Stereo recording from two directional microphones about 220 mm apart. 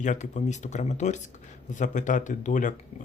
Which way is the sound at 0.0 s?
35° left (ahead or behind).